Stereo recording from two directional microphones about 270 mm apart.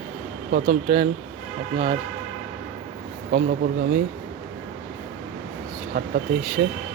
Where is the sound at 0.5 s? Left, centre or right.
Right.